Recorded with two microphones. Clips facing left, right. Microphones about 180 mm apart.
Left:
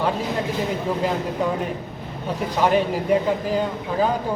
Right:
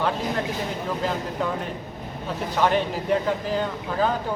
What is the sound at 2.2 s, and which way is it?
A man's voice, 10° left (ahead or behind).